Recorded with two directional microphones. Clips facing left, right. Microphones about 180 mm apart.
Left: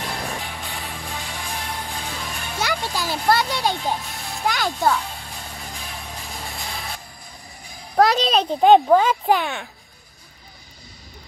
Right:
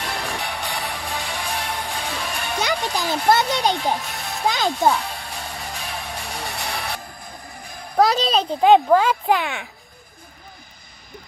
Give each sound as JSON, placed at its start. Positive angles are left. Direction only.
{"t": 0.0, "sound": "music", "side_deg": -75}
{"t": 2.9, "sound": "a child's voice", "side_deg": -20}
{"t": 3.7, "sound": "a child's voice", "side_deg": -75}
{"t": 4.5, "sound": "a child's voice", "side_deg": -20}
{"t": 4.9, "sound": "music", "side_deg": -75}
{"t": 7.6, "sound": "a sound", "side_deg": -55}
{"t": 7.9, "sound": "a child's voice", "side_deg": 0}